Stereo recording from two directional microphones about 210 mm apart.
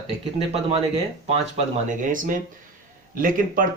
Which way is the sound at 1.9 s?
40° right (ahead or behind).